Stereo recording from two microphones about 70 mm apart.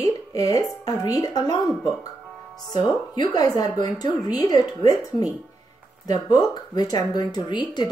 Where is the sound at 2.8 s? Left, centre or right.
Left.